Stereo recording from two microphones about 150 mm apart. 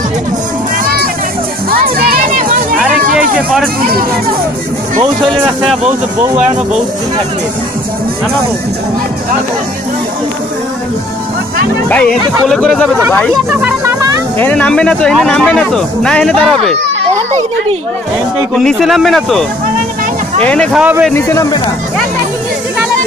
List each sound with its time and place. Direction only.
1.7 s music: 80° right
3.0 s a sound: 70° right (ahead or behind)
3.3 s speech: centre (ahead or behind)
11.9 s speech: 5° left (ahead or behind)
13.5 s speech: 5° right (ahead or behind)
13.8 s music: 20° right (ahead or behind)
14.4 s speech: 10° left (ahead or behind)
18.5 s speech: 5° left (ahead or behind)
20.4 s speech: 5° left (ahead or behind)
20.7 s speech: 10° right (ahead or behind)
21.1 s speech: 15° left (ahead or behind)